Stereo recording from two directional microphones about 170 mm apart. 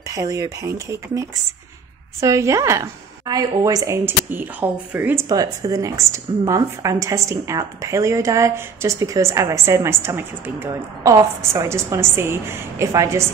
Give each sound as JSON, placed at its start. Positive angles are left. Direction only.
{"t": 0.1, "sound": "a woman's voice", "side_deg": -20}